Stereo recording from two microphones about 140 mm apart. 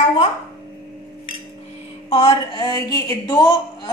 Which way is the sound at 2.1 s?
50° left (ahead or behind).